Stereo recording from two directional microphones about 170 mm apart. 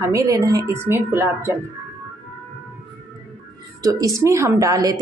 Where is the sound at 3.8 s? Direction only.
20° right (ahead or behind).